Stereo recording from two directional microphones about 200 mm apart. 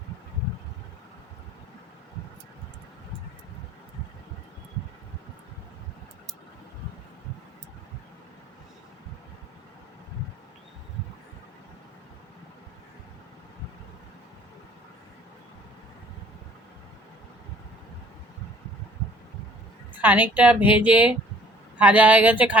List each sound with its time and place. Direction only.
20.0 s speech: 10° right (ahead or behind)